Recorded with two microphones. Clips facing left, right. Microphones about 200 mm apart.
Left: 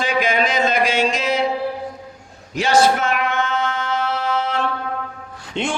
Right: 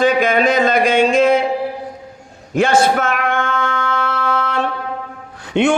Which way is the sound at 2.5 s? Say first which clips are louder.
Right 2 dB; 55° right (ahead or behind).